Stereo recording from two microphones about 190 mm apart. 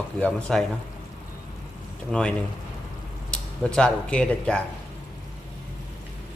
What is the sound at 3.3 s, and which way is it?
Speech, 5° left (ahead or behind).